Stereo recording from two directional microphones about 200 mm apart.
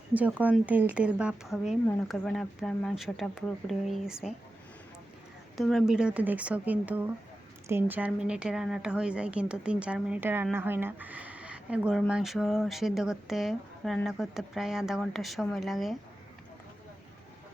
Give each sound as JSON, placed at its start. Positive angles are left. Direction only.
{"t": 0.1, "sound": "a woman's voice", "side_deg": -10}
{"t": 5.5, "sound": "a woman's voice", "side_deg": 0}